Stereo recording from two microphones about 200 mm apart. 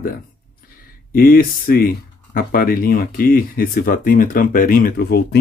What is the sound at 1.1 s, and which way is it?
Speech, 45° left (ahead or behind).